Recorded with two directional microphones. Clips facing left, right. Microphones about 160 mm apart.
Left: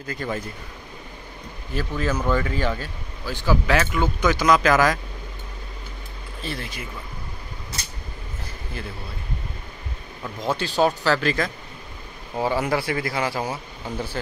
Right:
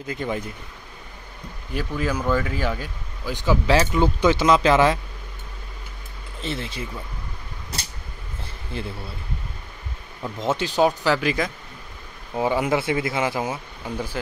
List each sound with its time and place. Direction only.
0.0 s speech: 20° right (ahead or behind)
1.7 s speech: 10° right (ahead or behind)
3.8 s speech: 30° right (ahead or behind)
6.4 s speech: 25° right (ahead or behind)
8.8 s speech: 25° right (ahead or behind)
10.2 s speech: 20° right (ahead or behind)
14.2 s speech: 5° right (ahead or behind)